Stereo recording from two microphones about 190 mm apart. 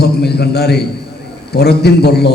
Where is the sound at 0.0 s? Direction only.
60° left (ahead or behind).